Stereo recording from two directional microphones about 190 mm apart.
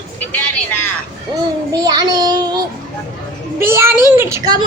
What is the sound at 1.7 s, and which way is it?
Child singing, 20° right (ahead or behind).